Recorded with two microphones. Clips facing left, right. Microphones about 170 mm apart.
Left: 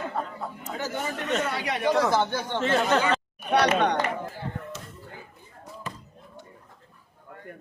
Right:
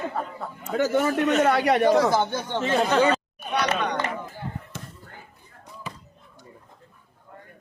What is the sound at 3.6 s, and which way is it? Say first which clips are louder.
Speech: left 3 dB; 65° left (ahead or behind).